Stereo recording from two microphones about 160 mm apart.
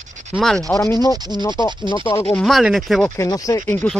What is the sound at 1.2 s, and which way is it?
Speech, 25° right (ahead or behind).